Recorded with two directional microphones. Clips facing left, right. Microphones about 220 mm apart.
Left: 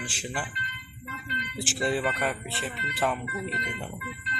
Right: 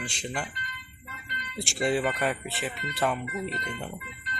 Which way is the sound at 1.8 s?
Centre (ahead or behind).